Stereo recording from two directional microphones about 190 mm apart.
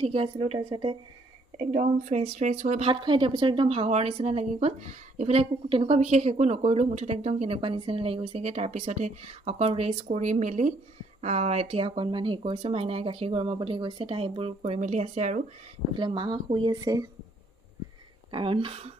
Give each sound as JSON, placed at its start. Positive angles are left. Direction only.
{"t": 0.0, "sound": "speech", "side_deg": -30}
{"t": 1.6, "sound": "a woman's voice", "side_deg": -35}
{"t": 15.9, "sound": "speech", "side_deg": -25}
{"t": 18.3, "sound": "speech", "side_deg": -25}